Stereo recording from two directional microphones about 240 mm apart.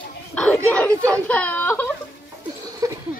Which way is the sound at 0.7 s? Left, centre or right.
Centre.